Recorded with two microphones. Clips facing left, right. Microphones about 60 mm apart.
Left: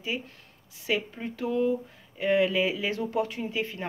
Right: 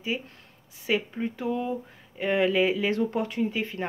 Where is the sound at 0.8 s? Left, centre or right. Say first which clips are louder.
Right 2 dB; right.